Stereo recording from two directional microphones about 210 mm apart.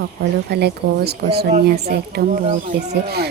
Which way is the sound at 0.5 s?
50° right (ahead or behind).